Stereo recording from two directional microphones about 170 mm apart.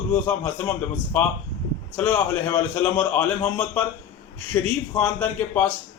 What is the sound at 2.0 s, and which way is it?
A man's voice, 10° left (ahead or behind).